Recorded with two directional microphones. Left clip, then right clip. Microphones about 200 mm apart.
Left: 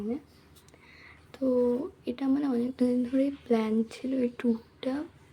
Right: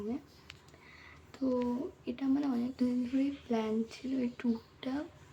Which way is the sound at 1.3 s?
15° left (ahead or behind).